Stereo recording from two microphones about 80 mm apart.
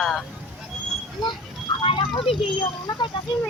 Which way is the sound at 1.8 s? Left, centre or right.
Left.